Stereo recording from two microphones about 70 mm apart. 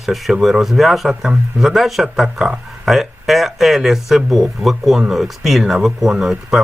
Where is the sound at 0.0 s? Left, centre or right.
Centre.